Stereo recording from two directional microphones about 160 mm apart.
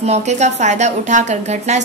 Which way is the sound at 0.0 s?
45° right (ahead or behind).